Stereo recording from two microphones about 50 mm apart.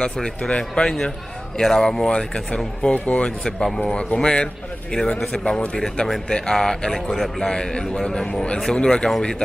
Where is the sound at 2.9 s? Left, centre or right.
Left.